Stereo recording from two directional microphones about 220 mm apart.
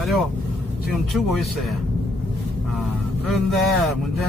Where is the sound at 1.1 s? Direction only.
Centre (ahead or behind).